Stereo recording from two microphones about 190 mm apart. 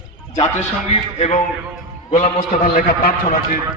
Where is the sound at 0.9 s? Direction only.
35° left (ahead or behind).